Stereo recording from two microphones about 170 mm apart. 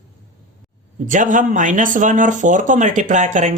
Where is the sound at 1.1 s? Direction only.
50° right (ahead or behind).